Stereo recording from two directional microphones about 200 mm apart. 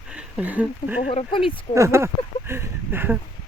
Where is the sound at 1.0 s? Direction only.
30° left (ahead or behind).